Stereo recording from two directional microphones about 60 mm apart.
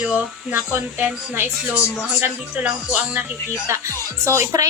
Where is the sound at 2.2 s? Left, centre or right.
Right.